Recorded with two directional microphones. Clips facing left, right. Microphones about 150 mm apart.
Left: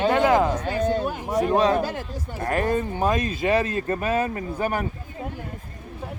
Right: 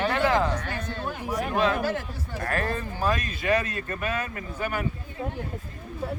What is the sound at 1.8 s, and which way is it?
Speech, 20° left (ahead or behind).